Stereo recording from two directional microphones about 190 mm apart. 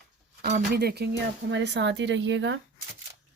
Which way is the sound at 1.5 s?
65° right (ahead or behind).